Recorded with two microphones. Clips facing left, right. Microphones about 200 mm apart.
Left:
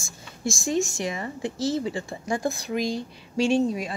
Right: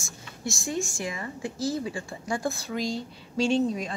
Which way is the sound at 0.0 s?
25° left (ahead or behind).